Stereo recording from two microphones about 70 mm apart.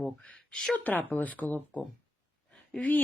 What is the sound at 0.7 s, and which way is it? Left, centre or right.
Speech, left.